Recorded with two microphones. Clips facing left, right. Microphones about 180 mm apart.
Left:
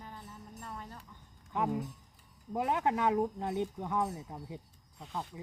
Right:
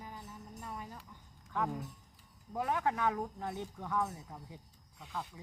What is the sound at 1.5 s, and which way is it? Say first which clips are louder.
Speech: left 4 dB; 20° left (ahead or behind).